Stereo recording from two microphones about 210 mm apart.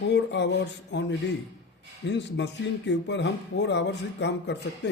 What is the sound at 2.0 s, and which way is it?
Speech, 55° left (ahead or behind).